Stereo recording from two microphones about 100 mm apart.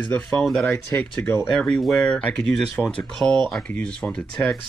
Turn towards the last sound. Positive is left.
turn(degrees=15)  # may be behind; listen again after turning